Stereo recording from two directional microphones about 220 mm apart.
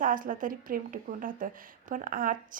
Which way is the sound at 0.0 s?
40° right (ahead or behind).